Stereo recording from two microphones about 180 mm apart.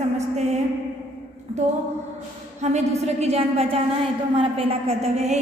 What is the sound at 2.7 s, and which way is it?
A man's voice, 35° right (ahead or behind).